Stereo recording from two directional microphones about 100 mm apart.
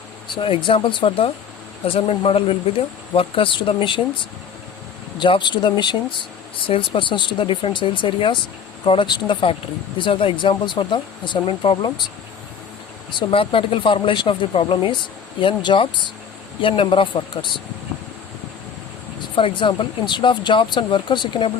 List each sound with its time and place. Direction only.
0.3 s speech: 60° left (ahead or behind)
5.2 s speech: 50° left (ahead or behind)
13.1 s speech: 55° left (ahead or behind)
19.4 s speech: 60° left (ahead or behind)